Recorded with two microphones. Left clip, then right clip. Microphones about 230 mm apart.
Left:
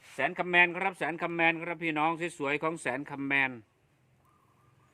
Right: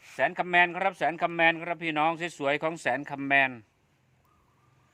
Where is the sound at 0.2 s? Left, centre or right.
Centre.